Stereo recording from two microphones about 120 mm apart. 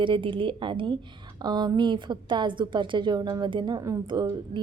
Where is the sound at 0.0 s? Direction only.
45° right (ahead or behind).